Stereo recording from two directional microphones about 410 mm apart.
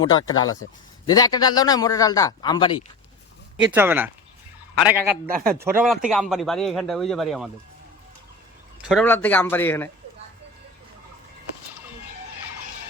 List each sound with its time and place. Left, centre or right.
0.0 s a man's voice: centre
3.7 s speech: centre
5.3 s speech: right
5.7 s speech: centre
8.9 s speech: centre